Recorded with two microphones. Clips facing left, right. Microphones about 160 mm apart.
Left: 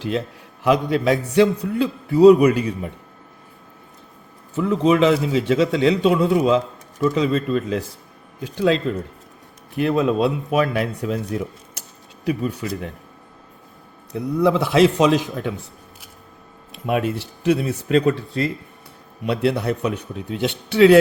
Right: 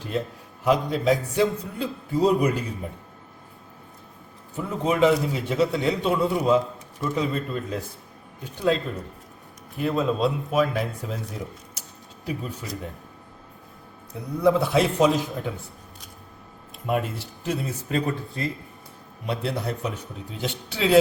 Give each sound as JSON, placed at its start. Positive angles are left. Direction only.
{"t": 0.6, "sound": "a man's voice", "side_deg": 75}
{"t": 4.5, "sound": "a man's voice", "side_deg": 90}
{"t": 9.7, "sound": "a man's voice", "side_deg": 75}
{"t": 14.1, "sound": "a man's voice", "side_deg": 85}
{"t": 16.7, "sound": "a man's voice", "side_deg": 75}